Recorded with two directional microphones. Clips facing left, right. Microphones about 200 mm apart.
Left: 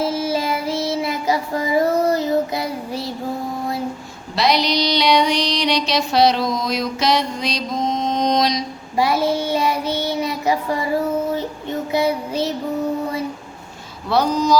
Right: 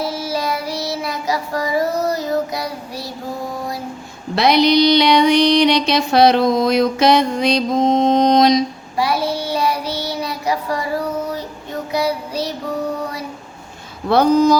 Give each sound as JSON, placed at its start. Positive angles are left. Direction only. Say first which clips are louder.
{"t": 0.0, "sound": "child singing", "louder": "left 2 dB", "side_deg": 25}
{"t": 4.4, "sound": "music", "louder": "right 5 dB", "side_deg": -55}
{"t": 9.0, "sound": "child singing", "louder": "left 1 dB", "side_deg": 20}
{"t": 14.1, "sound": "music", "louder": "right 4 dB", "side_deg": -55}